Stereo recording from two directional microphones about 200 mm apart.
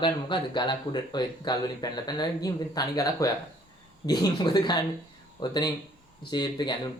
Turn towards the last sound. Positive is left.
turn(degrees=20)  # may be behind; listen again after turning